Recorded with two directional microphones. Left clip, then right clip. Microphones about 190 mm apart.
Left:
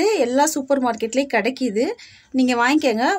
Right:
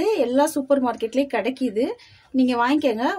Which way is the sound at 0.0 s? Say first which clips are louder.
Left 2 dB; 40° left (ahead or behind).